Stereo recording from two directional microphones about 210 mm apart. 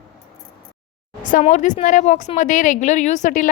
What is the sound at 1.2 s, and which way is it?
A woman's voice, 35° left (ahead or behind).